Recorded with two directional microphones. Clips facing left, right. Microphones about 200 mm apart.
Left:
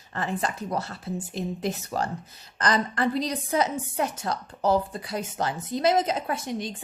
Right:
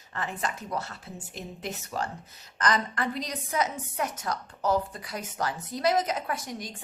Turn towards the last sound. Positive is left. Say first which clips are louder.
# left 5 dB
turn(degrees=25)  # may be behind; listen again after turning